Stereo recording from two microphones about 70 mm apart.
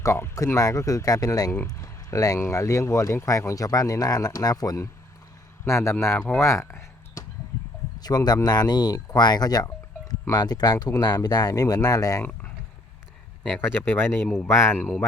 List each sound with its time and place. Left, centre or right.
0.0 s speech: left
5.6 s speech: left
6.1 s speech: centre
6.4 s a sound: left
7.9 s speech: left
12.2 s a sound: left
13.6 s speech: left